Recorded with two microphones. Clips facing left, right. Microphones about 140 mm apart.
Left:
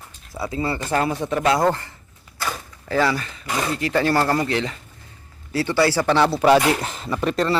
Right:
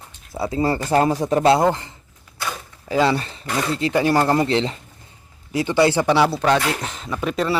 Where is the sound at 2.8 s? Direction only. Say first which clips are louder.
Right 2 dB; 15° right (ahead or behind).